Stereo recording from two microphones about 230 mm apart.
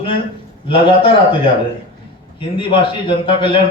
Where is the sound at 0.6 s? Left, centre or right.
Left.